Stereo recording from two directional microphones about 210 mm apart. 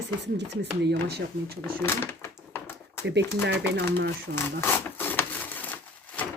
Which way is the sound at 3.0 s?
55° right (ahead or behind).